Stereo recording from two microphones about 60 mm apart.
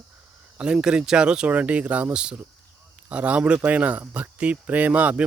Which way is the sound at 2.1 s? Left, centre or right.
Centre.